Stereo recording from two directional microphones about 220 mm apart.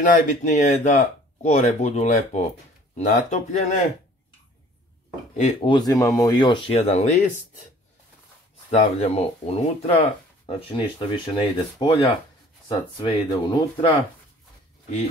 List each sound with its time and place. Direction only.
0.0 s speech: 35° left (ahead or behind)
5.7 s speech: 15° left (ahead or behind); by 7.3 s 30° left (ahead or behind)
8.7 s speech: 30° left (ahead or behind)